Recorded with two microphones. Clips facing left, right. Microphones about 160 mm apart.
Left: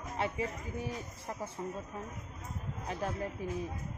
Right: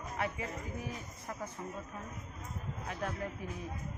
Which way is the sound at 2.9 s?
30° left (ahead or behind).